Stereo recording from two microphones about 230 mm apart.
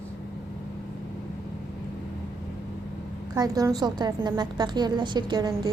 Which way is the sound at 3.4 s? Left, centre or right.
Centre.